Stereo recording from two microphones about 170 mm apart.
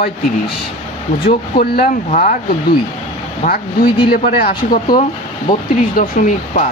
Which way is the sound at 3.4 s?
60° left (ahead or behind).